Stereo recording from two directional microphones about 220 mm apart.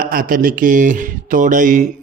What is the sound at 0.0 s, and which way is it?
A man's voice, 40° right (ahead or behind).